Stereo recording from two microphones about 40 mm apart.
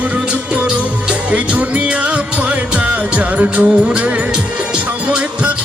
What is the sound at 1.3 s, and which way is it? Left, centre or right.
Music, right.